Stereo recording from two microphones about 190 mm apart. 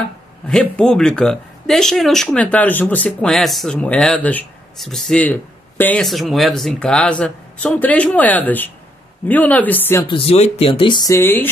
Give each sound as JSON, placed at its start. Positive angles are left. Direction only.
{"t": 0.5, "sound": "speech", "side_deg": 5}
{"t": 10.0, "sound": "speech", "side_deg": 30}